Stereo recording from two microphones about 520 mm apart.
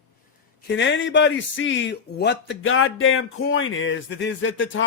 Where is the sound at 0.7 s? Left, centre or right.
Left.